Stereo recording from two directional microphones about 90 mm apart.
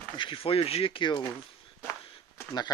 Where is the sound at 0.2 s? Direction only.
80° left.